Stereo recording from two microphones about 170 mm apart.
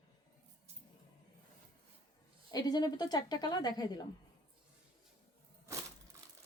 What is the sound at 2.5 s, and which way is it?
A woman's voice, 25° left (ahead or behind).